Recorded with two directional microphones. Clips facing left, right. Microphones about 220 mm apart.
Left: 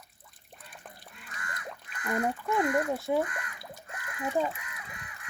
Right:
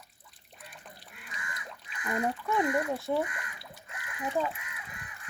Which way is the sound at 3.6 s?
45° left (ahead or behind).